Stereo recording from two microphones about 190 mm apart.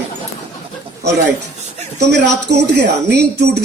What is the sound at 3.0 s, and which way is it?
Speech, 60° right (ahead or behind).